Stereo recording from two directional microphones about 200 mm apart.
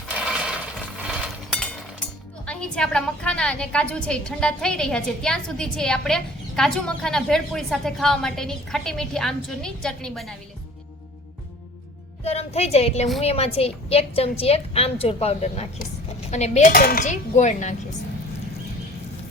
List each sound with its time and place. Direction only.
0.1 s mechanisms: 5° right (ahead or behind)
1.0 s a sound: 5° right (ahead or behind)
2.5 s a woman's voice: 5° left (ahead or behind)
12.2 s a woman's voice: 30° left (ahead or behind)